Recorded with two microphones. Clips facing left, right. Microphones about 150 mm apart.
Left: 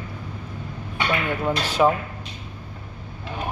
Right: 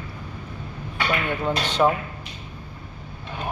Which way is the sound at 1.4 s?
5° left (ahead or behind).